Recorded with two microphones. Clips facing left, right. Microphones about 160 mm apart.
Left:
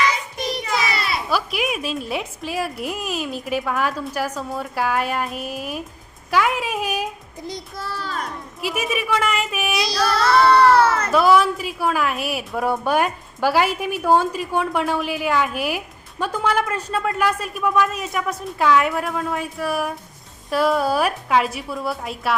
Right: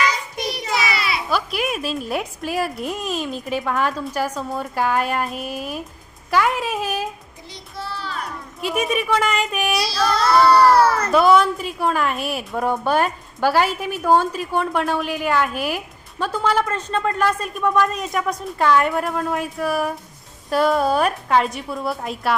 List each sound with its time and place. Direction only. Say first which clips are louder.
0.7 s a child's voice: right 2 dB; 5° right (ahead or behind)
7.4 s child singing: left 3 dB; 45° left (ahead or behind)
8.6 s a woman's voice: right 2 dB; 5° left (ahead or behind)
11.1 s a woman's voice: right 1 dB; centre (ahead or behind)